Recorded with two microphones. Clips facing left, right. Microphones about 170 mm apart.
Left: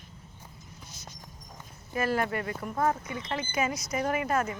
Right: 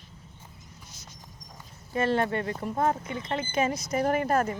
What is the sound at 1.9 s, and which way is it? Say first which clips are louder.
Speech: right 3 dB; 25° right (ahead or behind).